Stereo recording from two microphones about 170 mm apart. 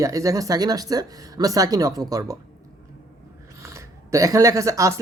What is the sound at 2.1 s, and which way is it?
Speech, 20° right (ahead or behind).